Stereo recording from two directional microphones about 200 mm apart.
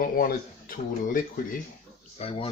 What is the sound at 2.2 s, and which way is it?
Speech, 30° left (ahead or behind).